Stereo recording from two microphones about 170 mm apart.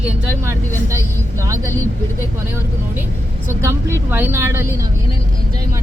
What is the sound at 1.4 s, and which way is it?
Speech, 15° right (ahead or behind).